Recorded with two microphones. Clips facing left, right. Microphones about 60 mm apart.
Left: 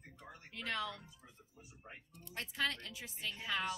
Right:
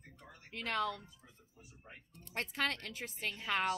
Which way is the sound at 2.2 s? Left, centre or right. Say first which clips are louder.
Right 2 dB; right.